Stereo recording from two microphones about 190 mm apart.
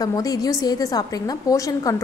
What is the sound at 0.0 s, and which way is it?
A woman's voice, 20° left (ahead or behind).